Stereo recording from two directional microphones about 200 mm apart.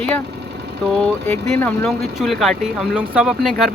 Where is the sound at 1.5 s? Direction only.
5° left (ahead or behind).